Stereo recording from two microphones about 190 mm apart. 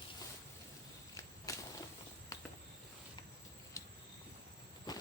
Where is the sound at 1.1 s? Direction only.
15° left (ahead or behind).